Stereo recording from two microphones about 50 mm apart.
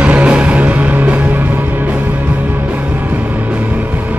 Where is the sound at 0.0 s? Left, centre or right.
Right.